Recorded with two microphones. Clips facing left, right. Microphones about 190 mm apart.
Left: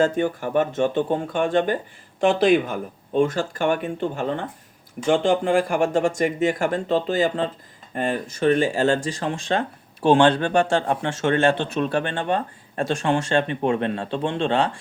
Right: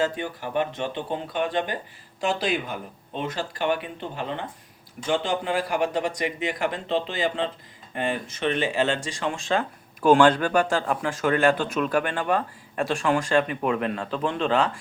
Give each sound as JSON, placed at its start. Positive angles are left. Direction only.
{"t": 0.0, "sound": "speech", "side_deg": 50}